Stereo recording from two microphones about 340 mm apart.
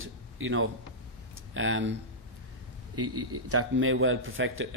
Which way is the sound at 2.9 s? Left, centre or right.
Right.